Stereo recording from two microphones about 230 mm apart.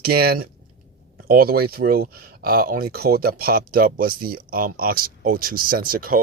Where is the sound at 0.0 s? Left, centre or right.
Right.